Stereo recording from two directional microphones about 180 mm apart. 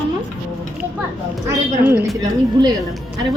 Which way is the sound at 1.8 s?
15° right (ahead or behind).